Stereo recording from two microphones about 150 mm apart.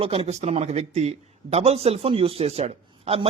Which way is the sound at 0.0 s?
40° right (ahead or behind).